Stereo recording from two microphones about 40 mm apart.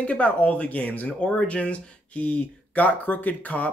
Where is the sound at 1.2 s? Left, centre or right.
Left.